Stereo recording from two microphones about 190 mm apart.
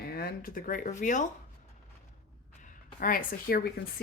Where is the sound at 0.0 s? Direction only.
55° left (ahead or behind).